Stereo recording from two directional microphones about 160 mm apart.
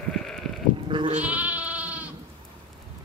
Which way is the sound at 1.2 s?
10° right (ahead or behind).